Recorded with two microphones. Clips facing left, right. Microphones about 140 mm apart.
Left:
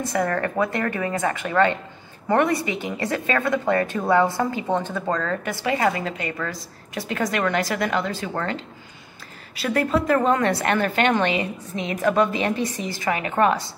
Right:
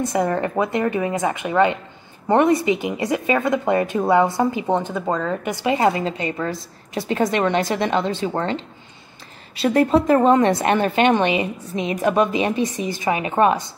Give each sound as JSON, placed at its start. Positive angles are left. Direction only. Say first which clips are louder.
{"t": 0.0, "sound": "a woman's voice", "louder": "right 3 dB", "side_deg": -20}